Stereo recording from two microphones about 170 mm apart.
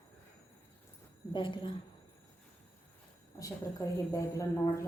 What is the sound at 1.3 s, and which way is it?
Speech, 30° left (ahead or behind).